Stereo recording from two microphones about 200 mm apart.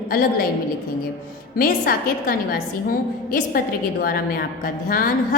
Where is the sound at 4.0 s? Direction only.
50° left (ahead or behind).